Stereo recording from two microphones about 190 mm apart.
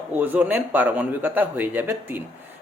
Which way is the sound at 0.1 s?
10° right (ahead or behind).